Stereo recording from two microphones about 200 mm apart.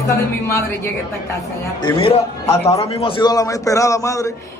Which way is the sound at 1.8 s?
25° left (ahead or behind).